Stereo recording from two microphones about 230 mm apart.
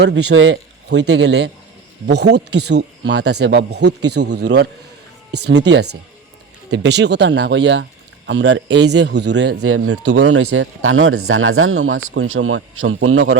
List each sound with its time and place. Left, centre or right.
0.0 s a man's voice: right
9.6 s a man's voice: right
10.1 s speech: right